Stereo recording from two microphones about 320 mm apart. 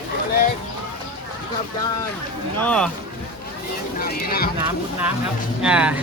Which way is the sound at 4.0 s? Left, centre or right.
Left.